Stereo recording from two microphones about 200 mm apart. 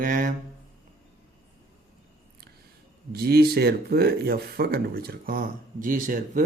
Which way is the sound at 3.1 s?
50° right (ahead or behind).